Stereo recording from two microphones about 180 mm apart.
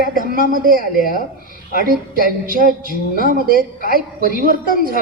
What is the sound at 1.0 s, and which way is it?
Speech, 50° left (ahead or behind).